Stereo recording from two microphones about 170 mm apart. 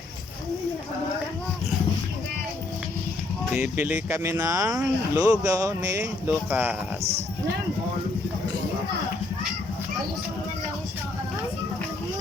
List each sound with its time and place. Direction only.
3.5 s speech: 10° right (ahead or behind)